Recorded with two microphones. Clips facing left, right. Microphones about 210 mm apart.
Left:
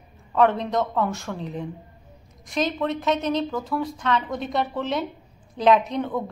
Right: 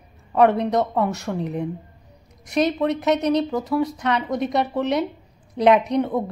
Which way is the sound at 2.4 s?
65° right (ahead or behind).